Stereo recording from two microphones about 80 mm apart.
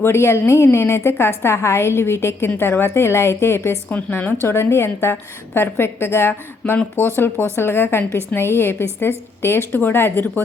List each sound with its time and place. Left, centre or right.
0.0 s a woman's voice: left